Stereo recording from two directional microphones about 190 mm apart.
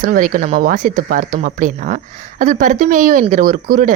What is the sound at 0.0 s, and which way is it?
A woman's voice, 45° right (ahead or behind).